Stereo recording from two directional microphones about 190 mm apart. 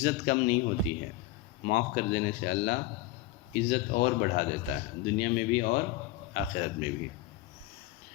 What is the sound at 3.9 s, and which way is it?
Speech, 50° left (ahead or behind).